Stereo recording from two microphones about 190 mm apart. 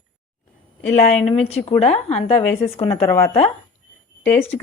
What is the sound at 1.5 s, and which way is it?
A woman's voice, 35° left (ahead or behind).